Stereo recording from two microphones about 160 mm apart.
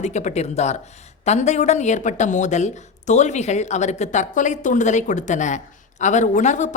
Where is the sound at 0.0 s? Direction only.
45° left (ahead or behind).